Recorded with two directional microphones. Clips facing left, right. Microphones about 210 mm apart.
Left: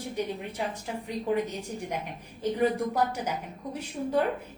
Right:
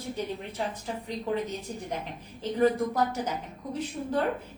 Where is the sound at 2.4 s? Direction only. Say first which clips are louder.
Right 1 dB; 10° left (ahead or behind).